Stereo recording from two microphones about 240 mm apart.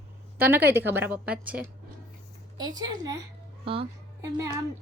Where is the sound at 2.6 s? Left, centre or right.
Centre.